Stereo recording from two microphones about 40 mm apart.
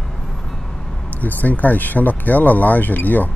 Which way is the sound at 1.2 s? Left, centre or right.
Left.